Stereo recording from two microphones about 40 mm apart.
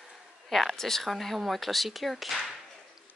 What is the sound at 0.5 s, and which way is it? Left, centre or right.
A woman's voice, centre.